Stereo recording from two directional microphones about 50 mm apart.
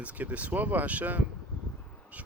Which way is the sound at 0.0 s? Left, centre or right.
Right.